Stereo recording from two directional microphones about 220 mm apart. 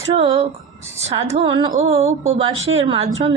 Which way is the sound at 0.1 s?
25° right (ahead or behind).